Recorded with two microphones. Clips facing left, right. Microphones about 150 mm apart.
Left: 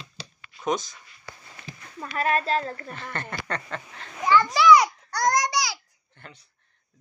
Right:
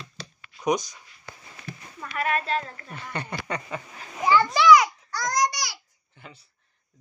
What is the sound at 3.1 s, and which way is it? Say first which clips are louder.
A child's voice: right 2 dB; 15° right (ahead or behind).